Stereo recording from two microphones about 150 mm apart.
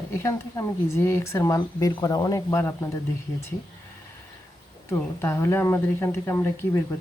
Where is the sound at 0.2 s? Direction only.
20° left (ahead or behind).